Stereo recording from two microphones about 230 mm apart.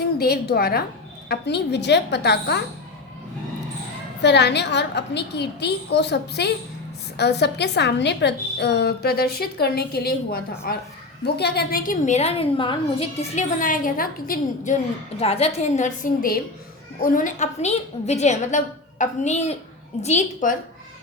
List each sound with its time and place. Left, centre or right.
0.2 s a woman's voice: left
4.2 s a woman's voice: left